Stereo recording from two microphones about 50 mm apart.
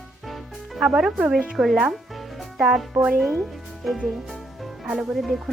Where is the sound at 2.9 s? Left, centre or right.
Right.